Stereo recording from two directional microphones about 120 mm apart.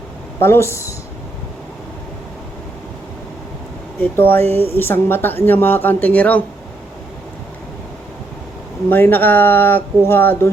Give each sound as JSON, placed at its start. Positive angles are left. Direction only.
{"t": 0.3, "sound": "speech", "side_deg": 20}
{"t": 4.2, "sound": "speech", "side_deg": 15}
{"t": 8.9, "sound": "speech", "side_deg": 15}